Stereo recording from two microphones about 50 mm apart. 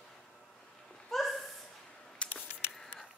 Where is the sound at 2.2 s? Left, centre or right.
Left.